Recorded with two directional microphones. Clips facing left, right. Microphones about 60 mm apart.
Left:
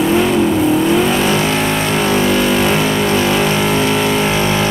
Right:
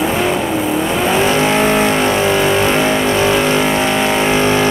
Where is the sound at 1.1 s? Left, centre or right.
Centre.